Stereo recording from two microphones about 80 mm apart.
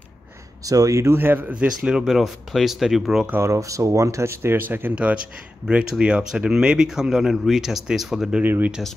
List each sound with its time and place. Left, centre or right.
0.7 s speech: right
1.7 s speech: centre
3.3 s speech: right; by 8.4 s centre
8.4 s speech: right